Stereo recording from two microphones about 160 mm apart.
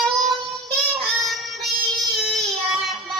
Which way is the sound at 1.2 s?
Centre (ahead or behind).